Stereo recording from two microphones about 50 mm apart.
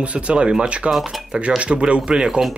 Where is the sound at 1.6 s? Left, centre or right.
Right.